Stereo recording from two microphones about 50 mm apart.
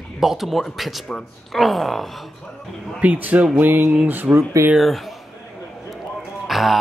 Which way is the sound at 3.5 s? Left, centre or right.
Right.